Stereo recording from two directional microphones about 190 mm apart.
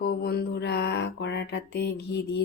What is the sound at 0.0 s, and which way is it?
Mantra, 55° left (ahead or behind).